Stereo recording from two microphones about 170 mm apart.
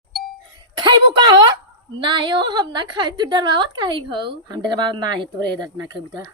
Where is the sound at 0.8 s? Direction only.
25° right (ahead or behind).